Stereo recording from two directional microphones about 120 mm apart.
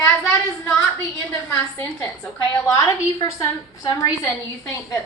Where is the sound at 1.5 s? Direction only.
20° left (ahead or behind).